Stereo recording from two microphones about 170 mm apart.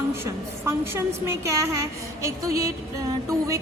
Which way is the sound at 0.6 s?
15° right (ahead or behind).